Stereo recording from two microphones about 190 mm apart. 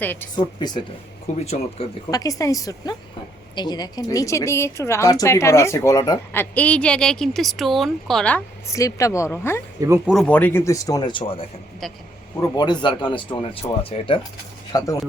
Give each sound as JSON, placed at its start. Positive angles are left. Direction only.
{"t": 0.0, "sound": "a woman's voice", "side_deg": 10}
{"t": 0.3, "sound": "speech", "side_deg": 20}
{"t": 1.3, "sound": "speech", "side_deg": 40}
{"t": 2.0, "sound": "a woman's voice", "side_deg": 20}